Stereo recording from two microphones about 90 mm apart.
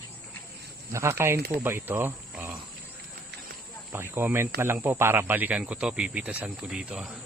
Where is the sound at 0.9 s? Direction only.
30° right (ahead or behind).